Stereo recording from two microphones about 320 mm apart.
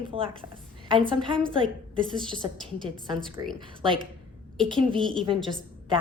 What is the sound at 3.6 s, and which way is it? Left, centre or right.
A woman's voice, centre.